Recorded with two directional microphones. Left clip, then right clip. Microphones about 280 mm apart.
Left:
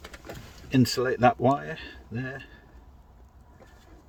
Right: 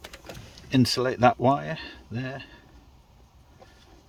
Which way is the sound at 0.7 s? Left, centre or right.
Right.